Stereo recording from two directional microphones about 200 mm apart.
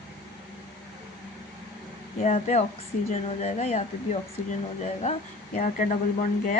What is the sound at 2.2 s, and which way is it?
A woman's voice, 35° left (ahead or behind).